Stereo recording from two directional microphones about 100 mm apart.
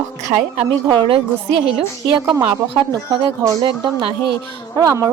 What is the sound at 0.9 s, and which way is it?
Speech, 50° right (ahead or behind).